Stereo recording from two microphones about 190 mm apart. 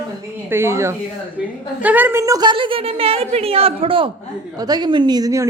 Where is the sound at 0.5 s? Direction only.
15° right (ahead or behind).